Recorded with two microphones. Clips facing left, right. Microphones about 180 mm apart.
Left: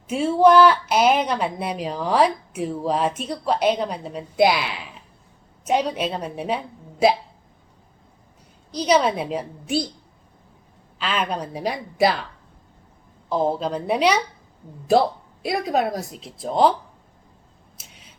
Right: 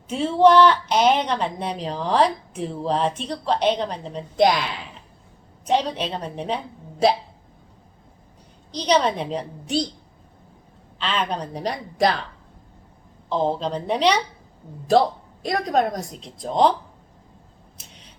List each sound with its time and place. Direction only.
0.1 s a woman's voice: 10° left (ahead or behind)
8.7 s a woman's voice: 10° left (ahead or behind)
10.9 s a woman's voice: 5° left (ahead or behind)
13.2 s a woman's voice: 5° left (ahead or behind)
15.4 s a woman's voice: 5° left (ahead or behind)